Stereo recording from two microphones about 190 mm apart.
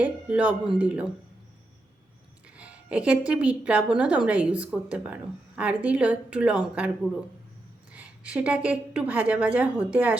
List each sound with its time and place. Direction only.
0.0 s a woman's voice: 5° right (ahead or behind)
2.6 s a woman's voice: 5° right (ahead or behind)